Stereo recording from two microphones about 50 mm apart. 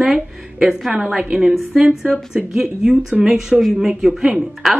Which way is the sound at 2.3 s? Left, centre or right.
Right.